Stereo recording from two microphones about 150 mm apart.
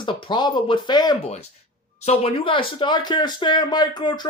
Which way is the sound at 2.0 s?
45° left (ahead or behind).